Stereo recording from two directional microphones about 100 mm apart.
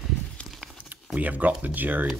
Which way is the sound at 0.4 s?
10° left (ahead or behind).